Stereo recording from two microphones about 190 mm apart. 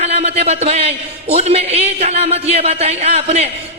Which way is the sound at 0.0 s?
35° right (ahead or behind).